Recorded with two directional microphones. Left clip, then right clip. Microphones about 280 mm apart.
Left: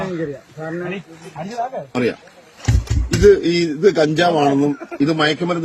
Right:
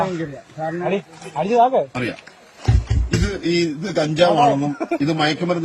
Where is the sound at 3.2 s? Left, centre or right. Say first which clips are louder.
Left 10 dB; centre.